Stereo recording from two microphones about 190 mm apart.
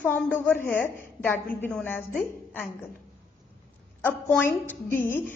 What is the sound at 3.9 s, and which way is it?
A woman's voice, 10° left (ahead or behind).